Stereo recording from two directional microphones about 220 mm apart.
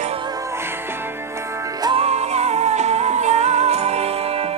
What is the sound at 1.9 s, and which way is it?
Music, 30° right (ahead or behind).